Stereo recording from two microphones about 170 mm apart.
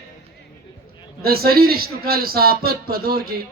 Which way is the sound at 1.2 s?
65° right (ahead or behind).